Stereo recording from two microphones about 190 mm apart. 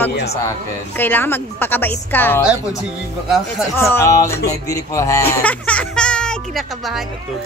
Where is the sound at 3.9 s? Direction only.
15° left (ahead or behind).